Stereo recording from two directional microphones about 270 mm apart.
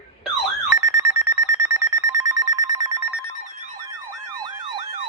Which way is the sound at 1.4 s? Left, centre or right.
Centre.